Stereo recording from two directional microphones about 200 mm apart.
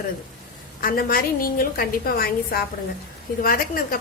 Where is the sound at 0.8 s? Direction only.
45° left (ahead or behind).